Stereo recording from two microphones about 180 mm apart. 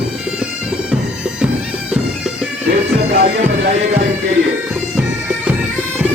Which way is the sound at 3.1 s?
65° right (ahead or behind).